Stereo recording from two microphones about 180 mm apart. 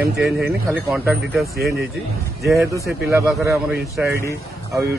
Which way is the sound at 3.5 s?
5° right (ahead or behind).